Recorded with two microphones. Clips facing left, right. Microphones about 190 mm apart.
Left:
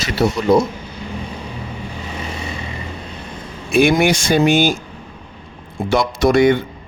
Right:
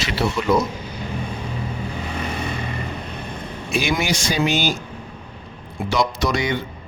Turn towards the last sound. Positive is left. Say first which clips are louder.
# left 10 dB
turn(degrees=55)  # may be behind; listen again after turning